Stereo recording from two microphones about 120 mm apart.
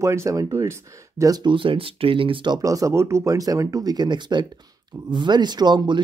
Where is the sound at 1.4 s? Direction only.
45° right (ahead or behind).